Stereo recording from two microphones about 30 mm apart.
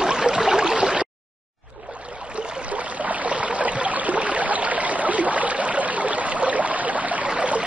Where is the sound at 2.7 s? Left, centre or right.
Right.